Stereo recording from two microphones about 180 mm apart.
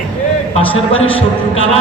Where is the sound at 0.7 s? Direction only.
30° left (ahead or behind).